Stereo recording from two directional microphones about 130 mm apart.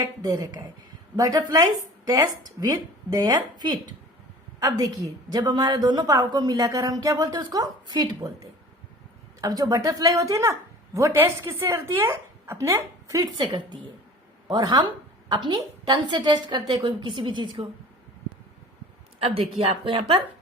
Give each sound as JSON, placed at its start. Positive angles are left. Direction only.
{"t": 0.2, "sound": "a woman's voice", "side_deg": -30}
{"t": 19.2, "sound": "a woman's voice", "side_deg": -45}